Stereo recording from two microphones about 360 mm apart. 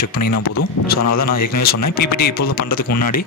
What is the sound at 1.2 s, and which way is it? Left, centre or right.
Speech, left.